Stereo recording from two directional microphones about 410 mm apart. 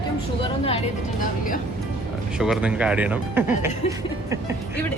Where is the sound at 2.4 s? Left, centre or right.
Centre.